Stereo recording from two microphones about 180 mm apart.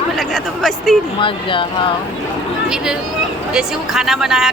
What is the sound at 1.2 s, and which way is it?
Speech, 30° left (ahead or behind).